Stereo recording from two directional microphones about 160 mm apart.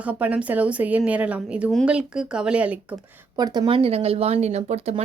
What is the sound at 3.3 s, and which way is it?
Speech, 25° right (ahead or behind).